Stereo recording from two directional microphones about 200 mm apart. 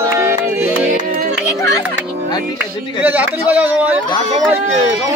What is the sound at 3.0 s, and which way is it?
Speech, 10° right (ahead or behind).